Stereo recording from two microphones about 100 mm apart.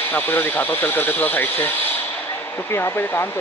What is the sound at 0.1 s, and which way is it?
Speech, 20° left (ahead or behind).